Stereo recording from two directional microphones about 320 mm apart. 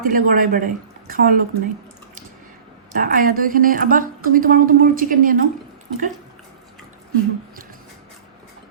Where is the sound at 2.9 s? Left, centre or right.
Right.